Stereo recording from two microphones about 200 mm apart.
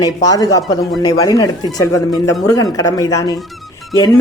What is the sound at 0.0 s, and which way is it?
Speech, 20° left (ahead or behind).